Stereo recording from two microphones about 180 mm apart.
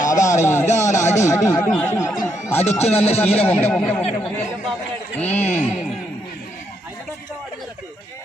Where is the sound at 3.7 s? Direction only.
5° left (ahead or behind).